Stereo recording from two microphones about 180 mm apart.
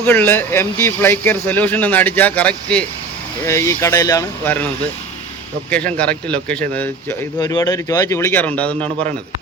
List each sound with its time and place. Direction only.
0.0 s speech: 10° left (ahead or behind)
5.7 s speech: 5° left (ahead or behind)
7.3 s speech: 20° left (ahead or behind)